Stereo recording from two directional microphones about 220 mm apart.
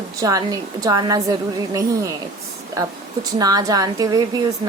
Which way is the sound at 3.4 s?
15° right (ahead or behind).